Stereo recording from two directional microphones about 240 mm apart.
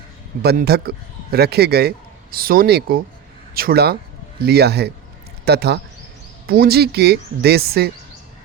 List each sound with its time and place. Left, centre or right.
0.4 s a man's voice: right